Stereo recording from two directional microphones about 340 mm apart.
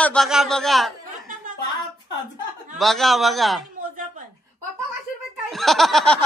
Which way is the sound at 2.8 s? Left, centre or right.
Centre.